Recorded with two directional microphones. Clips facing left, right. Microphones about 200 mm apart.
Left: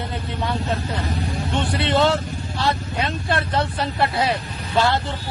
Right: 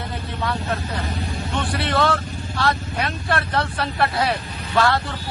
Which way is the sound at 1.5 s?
25° left (ahead or behind).